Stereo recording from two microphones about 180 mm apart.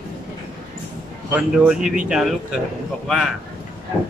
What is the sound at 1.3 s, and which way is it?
Speech, 5° right (ahead or behind).